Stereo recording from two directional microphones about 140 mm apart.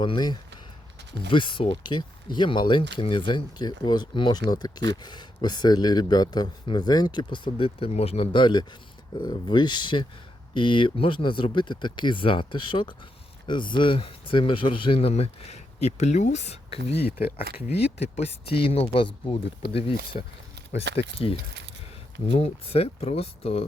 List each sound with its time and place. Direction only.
0.0 s speech: 30° left (ahead or behind)
20.1 s speech: 55° left (ahead or behind)
20.9 s speech: 40° left (ahead or behind)